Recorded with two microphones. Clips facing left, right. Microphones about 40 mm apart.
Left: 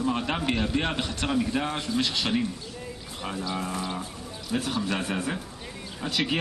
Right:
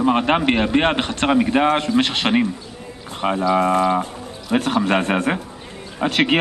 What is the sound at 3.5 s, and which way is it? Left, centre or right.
A man's voice, right.